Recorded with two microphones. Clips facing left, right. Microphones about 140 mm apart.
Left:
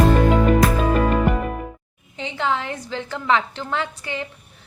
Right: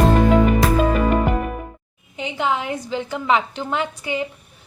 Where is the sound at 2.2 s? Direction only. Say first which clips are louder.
Right 1 dB; 15° right (ahead or behind).